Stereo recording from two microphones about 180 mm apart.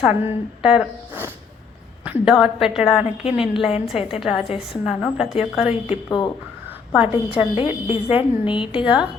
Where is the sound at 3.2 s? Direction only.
30° left (ahead or behind).